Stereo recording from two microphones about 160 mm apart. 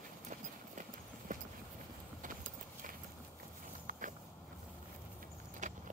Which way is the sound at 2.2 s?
60° right (ahead or behind).